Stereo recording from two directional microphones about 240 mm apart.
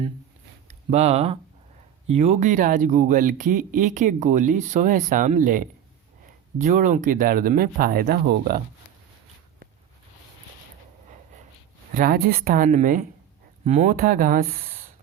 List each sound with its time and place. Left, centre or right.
0.7 s speech: right
11.9 s speech: right